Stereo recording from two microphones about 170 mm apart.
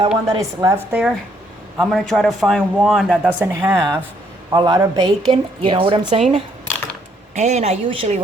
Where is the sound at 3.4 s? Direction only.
15° right (ahead or behind).